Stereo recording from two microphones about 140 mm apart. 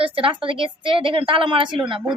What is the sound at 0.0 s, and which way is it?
Speech, 40° right (ahead or behind).